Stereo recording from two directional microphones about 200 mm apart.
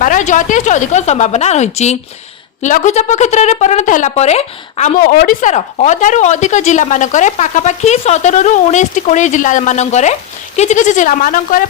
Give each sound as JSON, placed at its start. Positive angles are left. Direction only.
{"t": 0.0, "sound": "a woman's voice", "side_deg": 40}